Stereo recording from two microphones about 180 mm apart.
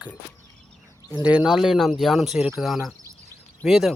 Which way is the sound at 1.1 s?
5° right (ahead or behind).